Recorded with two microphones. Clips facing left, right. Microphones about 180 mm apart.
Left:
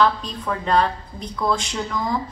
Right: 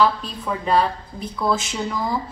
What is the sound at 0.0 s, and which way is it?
A woman's voice, 5° right (ahead or behind).